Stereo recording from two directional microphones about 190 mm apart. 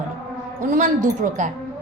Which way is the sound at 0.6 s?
40° right (ahead or behind).